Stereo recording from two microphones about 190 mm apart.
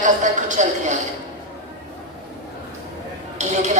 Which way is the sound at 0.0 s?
40° right (ahead or behind).